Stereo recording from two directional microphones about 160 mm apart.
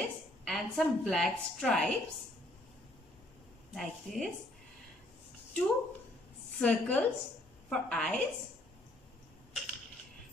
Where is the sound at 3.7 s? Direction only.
Centre (ahead or behind).